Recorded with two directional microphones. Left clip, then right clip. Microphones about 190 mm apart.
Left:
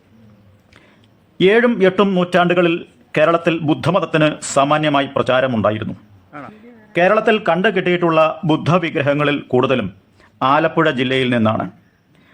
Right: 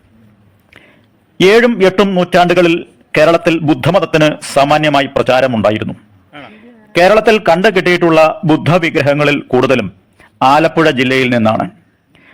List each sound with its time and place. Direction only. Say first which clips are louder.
1.4 s a man's voice: right 5 dB; 20° right (ahead or behind)